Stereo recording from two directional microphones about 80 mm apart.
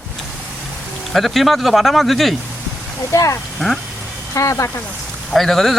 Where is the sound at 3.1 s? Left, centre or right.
Left.